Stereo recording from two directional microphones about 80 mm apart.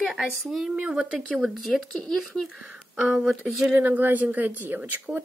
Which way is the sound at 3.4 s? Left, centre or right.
Right.